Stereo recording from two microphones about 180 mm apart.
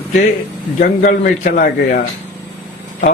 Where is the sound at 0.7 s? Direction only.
50° left (ahead or behind).